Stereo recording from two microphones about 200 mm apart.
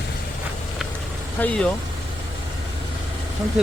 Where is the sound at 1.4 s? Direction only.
5° left (ahead or behind).